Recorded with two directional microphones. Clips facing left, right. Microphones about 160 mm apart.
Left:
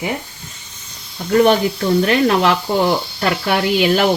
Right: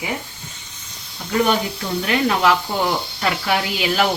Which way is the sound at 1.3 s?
50° left (ahead or behind).